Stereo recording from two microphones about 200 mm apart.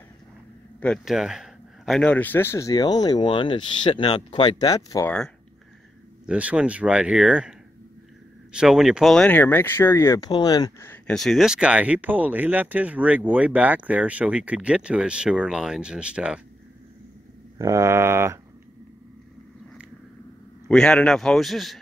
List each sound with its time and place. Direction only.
0.7 s speech: 5° left (ahead or behind)
6.2 s speech: 5° right (ahead or behind)
17.6 s a sound: 15° right (ahead or behind)
20.6 s speech: 5° left (ahead or behind)